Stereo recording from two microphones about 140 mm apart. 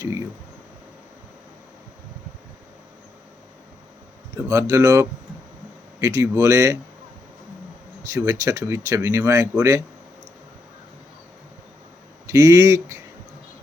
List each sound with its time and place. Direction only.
4.4 s speech: 25° right (ahead or behind)
8.1 s speech: 25° right (ahead or behind)
12.3 s speech: 25° right (ahead or behind)